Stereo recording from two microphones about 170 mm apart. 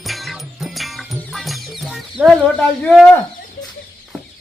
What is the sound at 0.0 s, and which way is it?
Music, centre (ahead or behind).